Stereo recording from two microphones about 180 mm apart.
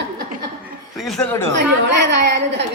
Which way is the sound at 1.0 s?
Centre (ahead or behind).